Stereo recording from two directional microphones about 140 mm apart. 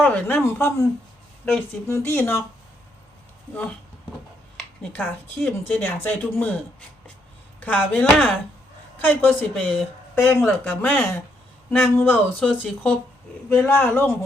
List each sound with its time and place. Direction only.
0.0 s speech: 10° left (ahead or behind)
1.9 s speech: 15° left (ahead or behind)
4.5 s speech: 10° left (ahead or behind)
7.6 s speech: 10° left (ahead or behind)